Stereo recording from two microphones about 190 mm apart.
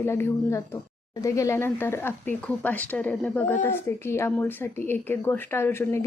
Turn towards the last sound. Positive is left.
turn(degrees=10)  # may be behind; listen again after turning